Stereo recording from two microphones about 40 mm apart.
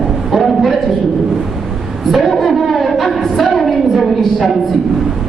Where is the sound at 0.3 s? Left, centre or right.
Centre.